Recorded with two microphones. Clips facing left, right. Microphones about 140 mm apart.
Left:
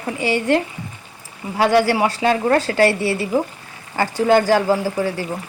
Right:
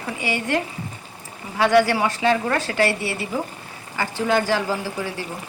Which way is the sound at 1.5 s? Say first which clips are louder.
Left 2 dB; 30° left (ahead or behind).